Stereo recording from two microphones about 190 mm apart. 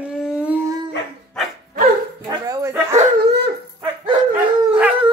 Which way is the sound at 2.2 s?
20° right (ahead or behind).